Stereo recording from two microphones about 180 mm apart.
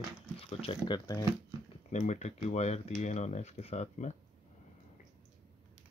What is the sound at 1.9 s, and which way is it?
Speech, 40° left (ahead or behind).